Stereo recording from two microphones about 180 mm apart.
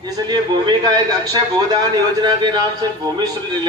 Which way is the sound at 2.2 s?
25° right (ahead or behind).